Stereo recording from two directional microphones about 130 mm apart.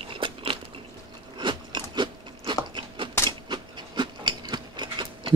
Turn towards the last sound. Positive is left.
turn(degrees=-35)  # may be behind; listen again after turning